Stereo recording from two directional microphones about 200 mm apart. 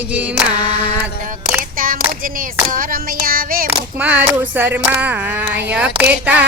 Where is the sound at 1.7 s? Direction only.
45° right (ahead or behind).